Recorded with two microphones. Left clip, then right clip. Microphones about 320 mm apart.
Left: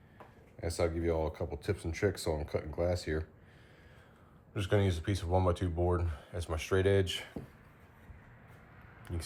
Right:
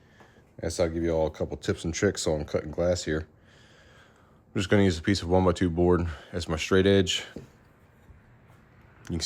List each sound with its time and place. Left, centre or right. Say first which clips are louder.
0.6 s speech: right 6 dB; right
4.5 s speech: right 8 dB; right